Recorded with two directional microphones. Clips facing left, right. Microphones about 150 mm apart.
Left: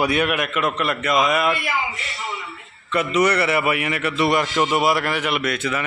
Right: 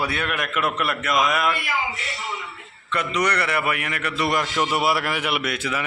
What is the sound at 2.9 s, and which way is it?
A man's voice, 5° left (ahead or behind).